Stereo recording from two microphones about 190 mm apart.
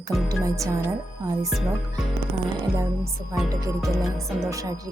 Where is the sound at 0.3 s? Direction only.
15° right (ahead or behind).